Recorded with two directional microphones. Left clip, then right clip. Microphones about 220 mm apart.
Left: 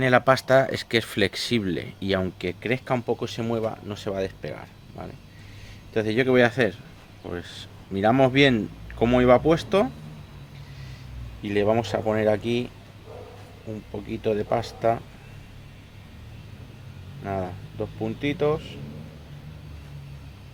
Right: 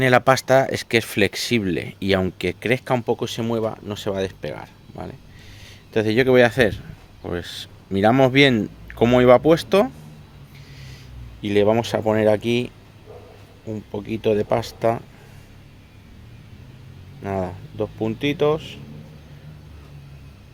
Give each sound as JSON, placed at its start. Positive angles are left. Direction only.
{"t": 0.0, "sound": "speech", "side_deg": -45}
{"t": 11.4, "sound": "speech", "side_deg": -50}
{"t": 17.2, "sound": "speech", "side_deg": -50}